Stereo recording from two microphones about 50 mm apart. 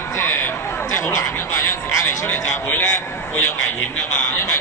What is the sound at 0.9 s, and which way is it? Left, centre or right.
Speech, left.